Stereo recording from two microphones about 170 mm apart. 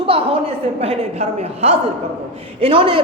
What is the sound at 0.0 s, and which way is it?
A woman's voice, 35° right (ahead or behind).